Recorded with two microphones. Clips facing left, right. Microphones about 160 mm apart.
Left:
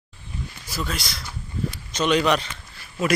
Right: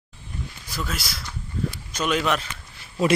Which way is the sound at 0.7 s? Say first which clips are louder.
Left 2 dB; centre (ahead or behind).